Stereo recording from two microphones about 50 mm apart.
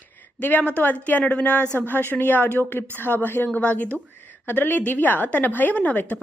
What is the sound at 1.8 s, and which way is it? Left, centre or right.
A woman's voice, left.